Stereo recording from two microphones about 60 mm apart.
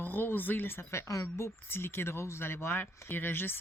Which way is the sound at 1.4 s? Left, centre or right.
Left.